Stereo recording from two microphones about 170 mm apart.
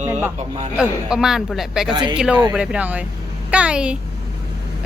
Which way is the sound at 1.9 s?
25° right (ahead or behind).